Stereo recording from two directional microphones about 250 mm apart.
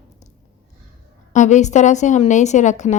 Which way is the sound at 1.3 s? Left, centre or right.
Left.